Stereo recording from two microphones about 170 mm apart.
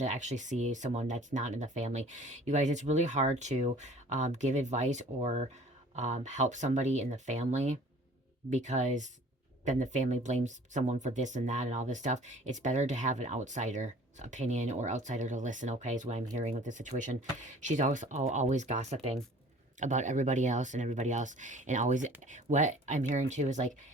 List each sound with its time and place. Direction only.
0.0 s speech: 45° right (ahead or behind)